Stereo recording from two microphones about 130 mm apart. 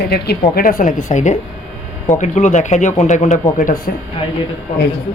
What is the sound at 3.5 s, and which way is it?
Speech, 90° left.